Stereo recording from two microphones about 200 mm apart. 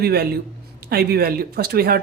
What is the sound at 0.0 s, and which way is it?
Speech, 50° right (ahead or behind).